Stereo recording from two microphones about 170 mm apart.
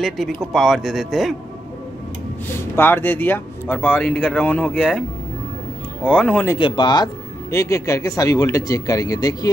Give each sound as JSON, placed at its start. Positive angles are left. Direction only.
{"t": 0.5, "sound": "a man's voice", "side_deg": 0}
{"t": 2.7, "sound": "speech", "side_deg": 10}
{"t": 6.0, "sound": "speech", "side_deg": 5}
{"t": 6.6, "sound": "speech", "side_deg": 30}